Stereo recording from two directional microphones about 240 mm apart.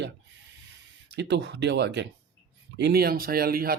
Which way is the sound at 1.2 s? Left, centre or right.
Right.